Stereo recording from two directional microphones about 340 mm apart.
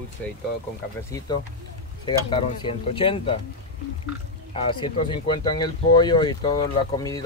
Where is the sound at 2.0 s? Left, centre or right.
Centre.